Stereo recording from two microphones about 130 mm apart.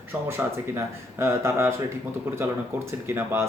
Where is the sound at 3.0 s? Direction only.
20° right (ahead or behind).